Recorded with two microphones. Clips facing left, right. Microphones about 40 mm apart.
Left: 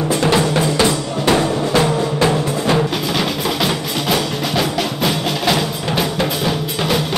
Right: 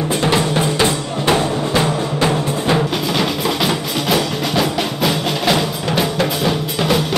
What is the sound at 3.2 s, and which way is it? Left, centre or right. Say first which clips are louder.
Music: right 1 dB; centre.